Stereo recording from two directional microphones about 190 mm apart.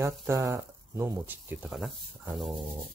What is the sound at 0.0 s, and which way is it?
Speech, 15° right (ahead or behind).